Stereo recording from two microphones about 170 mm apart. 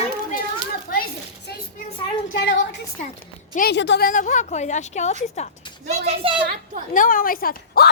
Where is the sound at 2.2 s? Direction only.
80° left.